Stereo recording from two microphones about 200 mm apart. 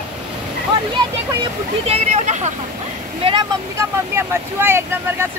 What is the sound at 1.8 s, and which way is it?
Speech, 35° right (ahead or behind).